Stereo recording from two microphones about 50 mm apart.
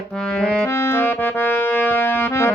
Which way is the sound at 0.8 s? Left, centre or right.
Left.